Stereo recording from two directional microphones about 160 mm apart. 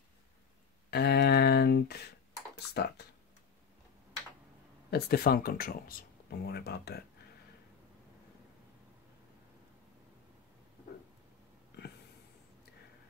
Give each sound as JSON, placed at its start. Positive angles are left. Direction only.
{"t": 0.8, "sound": "speech", "side_deg": 90}
{"t": 2.8, "sound": "speech", "side_deg": 80}
{"t": 4.9, "sound": "speech", "side_deg": 80}